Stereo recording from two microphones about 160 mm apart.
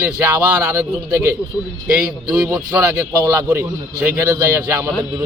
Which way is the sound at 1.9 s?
5° right (ahead or behind).